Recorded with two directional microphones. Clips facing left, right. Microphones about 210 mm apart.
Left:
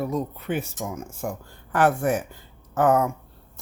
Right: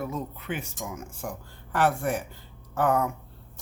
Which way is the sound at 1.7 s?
50° left (ahead or behind).